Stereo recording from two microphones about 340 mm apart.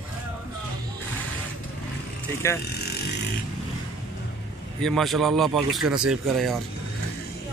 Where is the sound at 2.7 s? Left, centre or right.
Left.